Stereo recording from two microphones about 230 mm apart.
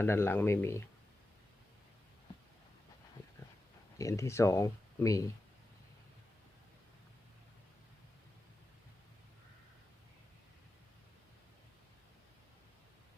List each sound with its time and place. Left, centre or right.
0.0 s speech: centre
3.9 s speech: centre